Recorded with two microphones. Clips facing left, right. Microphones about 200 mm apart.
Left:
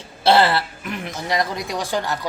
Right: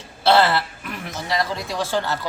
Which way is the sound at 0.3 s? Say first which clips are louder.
Left 1 dB; 15° left (ahead or behind).